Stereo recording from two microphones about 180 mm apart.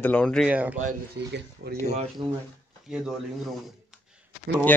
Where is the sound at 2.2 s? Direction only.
25° right (ahead or behind).